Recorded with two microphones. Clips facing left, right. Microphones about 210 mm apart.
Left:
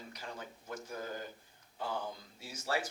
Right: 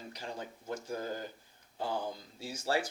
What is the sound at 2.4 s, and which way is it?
Speech, 30° right (ahead or behind).